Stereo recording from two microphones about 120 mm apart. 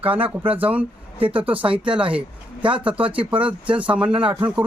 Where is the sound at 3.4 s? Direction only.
10° right (ahead or behind).